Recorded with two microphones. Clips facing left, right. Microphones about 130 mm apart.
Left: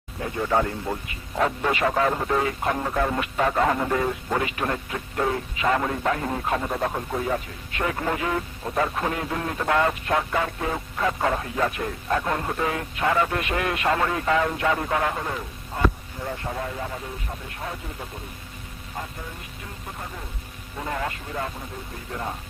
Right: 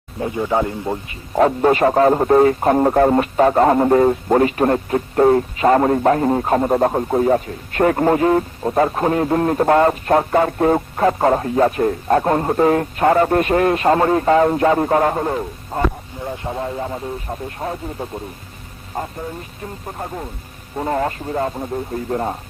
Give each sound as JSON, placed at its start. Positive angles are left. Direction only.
{"t": 0.2, "sound": "speech", "side_deg": -20}
{"t": 1.0, "sound": "a man's voice", "side_deg": -35}
{"t": 16.2, "sound": "a man's voice", "side_deg": -20}
{"t": 20.7, "sound": "a man's voice", "side_deg": -40}